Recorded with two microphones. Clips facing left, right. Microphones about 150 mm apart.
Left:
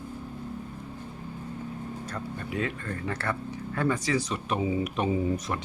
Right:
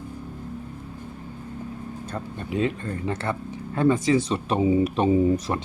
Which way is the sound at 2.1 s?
25° right (ahead or behind).